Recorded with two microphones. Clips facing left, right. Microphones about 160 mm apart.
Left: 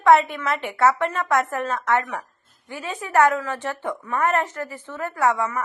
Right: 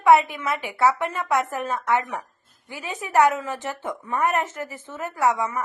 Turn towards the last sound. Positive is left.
turn(degrees=-15)  # may be behind; listen again after turning